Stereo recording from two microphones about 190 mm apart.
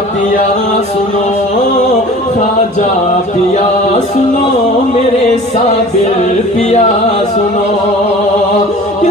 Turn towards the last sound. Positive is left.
turn(degrees=35)  # may be behind; listen again after turning